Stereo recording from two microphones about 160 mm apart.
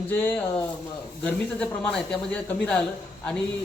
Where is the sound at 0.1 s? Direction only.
15° left (ahead or behind).